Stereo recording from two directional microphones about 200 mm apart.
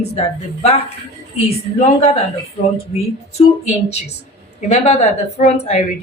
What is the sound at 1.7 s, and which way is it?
Speech, 30° left (ahead or behind).